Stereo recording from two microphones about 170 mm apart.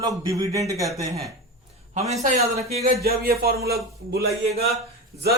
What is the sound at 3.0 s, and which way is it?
Speech, 65° right (ahead or behind).